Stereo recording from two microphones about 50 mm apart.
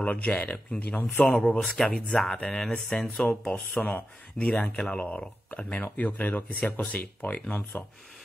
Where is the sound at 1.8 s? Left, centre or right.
Left.